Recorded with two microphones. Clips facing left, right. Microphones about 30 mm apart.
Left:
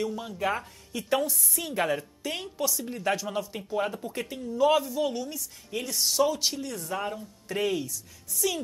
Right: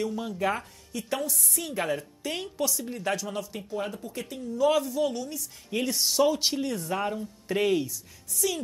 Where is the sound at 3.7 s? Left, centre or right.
Left.